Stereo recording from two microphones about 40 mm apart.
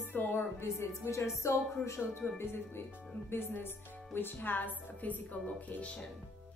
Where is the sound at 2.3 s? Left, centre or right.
Left.